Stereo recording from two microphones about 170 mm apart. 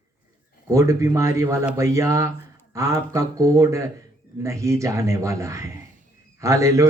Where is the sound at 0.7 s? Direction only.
15° right (ahead or behind).